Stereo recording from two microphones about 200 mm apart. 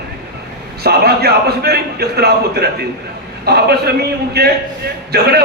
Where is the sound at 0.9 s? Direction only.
55° right (ahead or behind).